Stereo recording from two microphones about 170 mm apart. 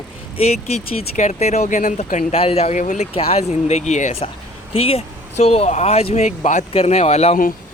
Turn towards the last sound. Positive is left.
turn(degrees=40)  # may be behind; listen again after turning